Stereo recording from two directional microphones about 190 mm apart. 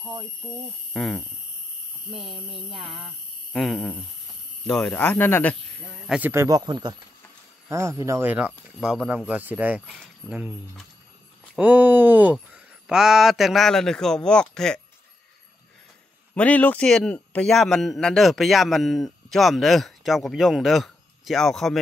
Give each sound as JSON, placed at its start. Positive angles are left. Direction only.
{"t": 0.9, "sound": "a man's voice", "side_deg": 0}
{"t": 6.0, "sound": "a man's voice", "side_deg": -10}
{"t": 16.3, "sound": "a man's voice", "side_deg": 5}